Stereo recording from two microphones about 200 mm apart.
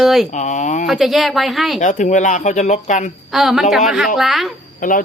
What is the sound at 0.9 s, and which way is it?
Speech, centre (ahead or behind).